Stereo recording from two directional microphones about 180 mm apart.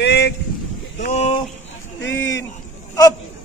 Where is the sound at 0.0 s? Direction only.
70° left (ahead or behind).